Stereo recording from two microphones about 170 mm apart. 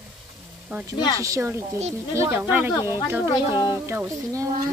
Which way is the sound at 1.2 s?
15° right (ahead or behind).